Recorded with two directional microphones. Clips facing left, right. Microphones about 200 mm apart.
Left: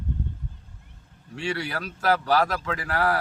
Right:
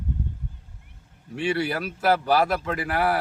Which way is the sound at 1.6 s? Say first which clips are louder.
Right 2 dB; 10° right (ahead or behind).